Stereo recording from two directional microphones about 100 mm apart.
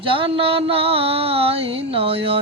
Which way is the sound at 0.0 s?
60° right (ahead or behind).